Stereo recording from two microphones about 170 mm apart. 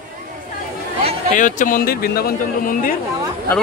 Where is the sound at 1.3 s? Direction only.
50° left (ahead or behind).